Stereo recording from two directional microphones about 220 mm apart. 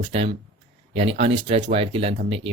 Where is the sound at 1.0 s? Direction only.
30° right (ahead or behind).